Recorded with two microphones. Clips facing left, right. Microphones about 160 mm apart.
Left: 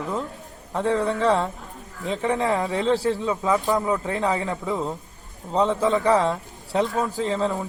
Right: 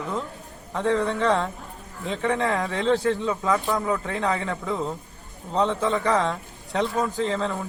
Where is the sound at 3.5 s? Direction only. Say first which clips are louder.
Left 2 dB; 15° left (ahead or behind).